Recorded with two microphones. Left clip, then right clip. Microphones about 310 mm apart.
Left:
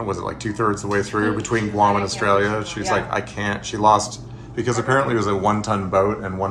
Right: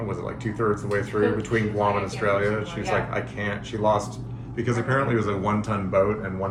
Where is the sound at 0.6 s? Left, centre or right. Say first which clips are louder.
Left 4 dB; left.